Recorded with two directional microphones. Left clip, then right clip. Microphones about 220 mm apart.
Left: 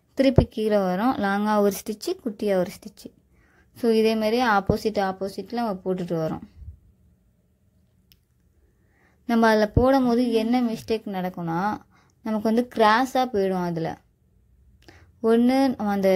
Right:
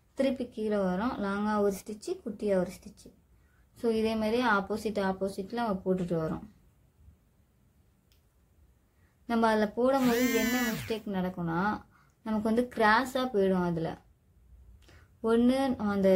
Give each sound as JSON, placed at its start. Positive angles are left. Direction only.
{"t": 0.1, "sound": "a woman's voice", "side_deg": 35}
{"t": 9.3, "sound": "a woman's voice", "side_deg": 35}
{"t": 14.8, "sound": "a sound", "side_deg": 25}
{"t": 15.2, "sound": "speech", "side_deg": 30}